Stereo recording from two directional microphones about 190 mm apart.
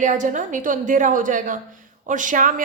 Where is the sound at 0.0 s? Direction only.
40° right (ahead or behind).